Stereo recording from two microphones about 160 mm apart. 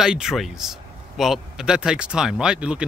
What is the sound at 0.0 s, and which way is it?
A man's voice, 5° right (ahead or behind).